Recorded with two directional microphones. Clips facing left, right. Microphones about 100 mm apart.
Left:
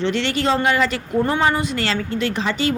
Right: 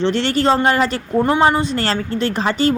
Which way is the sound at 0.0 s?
35° right (ahead or behind).